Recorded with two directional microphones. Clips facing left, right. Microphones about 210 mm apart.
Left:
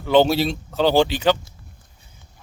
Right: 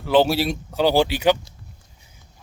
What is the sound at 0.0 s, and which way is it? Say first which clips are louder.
Speech: left 1 dB; 5° right (ahead or behind).